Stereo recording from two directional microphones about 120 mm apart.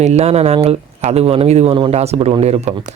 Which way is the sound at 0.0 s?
65° right (ahead or behind).